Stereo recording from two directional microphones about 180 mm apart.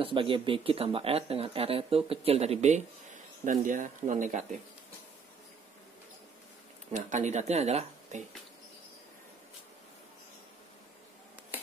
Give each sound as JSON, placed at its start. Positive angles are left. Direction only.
{"t": 0.0, "sound": "speech", "side_deg": -30}
{"t": 6.9, "sound": "speech", "side_deg": -40}